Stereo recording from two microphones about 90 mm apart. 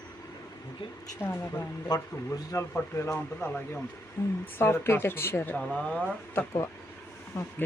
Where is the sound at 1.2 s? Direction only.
25° left (ahead or behind).